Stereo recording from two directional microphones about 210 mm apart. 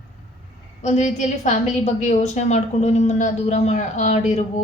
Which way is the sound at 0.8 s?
35° left (ahead or behind).